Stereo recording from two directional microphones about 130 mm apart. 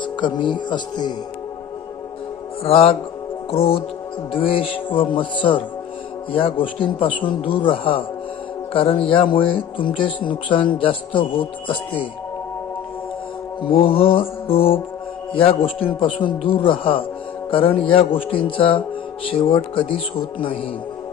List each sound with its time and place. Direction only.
0.0 s speech: 35° left (ahead or behind)
2.6 s a man's voice: 50° left (ahead or behind)
13.6 s a man's voice: 40° left (ahead or behind)